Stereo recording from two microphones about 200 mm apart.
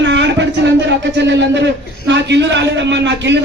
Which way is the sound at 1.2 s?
60° right (ahead or behind).